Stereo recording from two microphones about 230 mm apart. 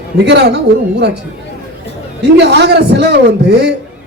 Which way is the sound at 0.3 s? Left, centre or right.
Right.